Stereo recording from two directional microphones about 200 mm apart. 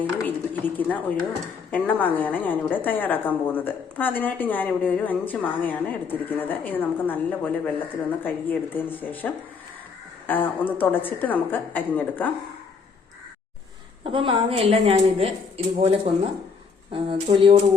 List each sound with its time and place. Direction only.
0.0 s a woman's voice: 10° left (ahead or behind)
14.0 s a woman's voice: 25° right (ahead or behind)